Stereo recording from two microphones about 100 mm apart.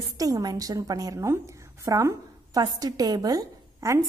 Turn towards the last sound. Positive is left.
turn(degrees=-30)  # may be behind; listen again after turning